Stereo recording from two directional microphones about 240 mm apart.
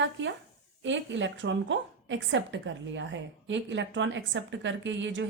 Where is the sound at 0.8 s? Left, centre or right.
Right.